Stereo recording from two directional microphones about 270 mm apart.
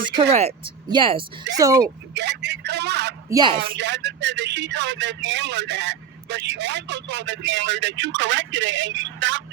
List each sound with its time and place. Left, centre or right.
0.2 s speech: right
2.1 s speech: right
3.2 s speech: centre
3.6 s speech: right